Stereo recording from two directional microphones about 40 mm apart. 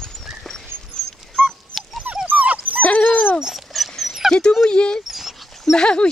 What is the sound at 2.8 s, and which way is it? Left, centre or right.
Dog, left.